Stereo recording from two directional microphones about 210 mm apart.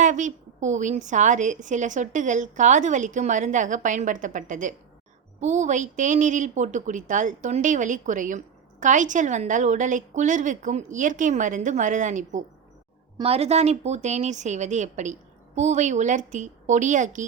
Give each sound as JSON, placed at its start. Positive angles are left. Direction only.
{"t": 0.0, "sound": "a woman's voice", "side_deg": -35}